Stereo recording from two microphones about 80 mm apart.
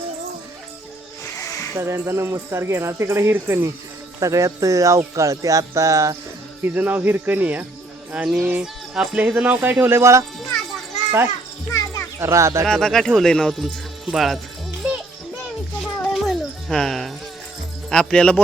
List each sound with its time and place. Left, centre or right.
1.7 s speech: right
6.6 s speech: right
8.1 s speech: centre
8.4 s speech: right
10.0 s speech: right
11.7 s music: left
12.2 s speech: right
12.6 s speech: centre
14.8 s music: centre
17.8 s speech: centre